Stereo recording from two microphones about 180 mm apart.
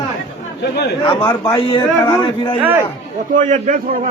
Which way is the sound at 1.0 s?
25° left (ahead or behind).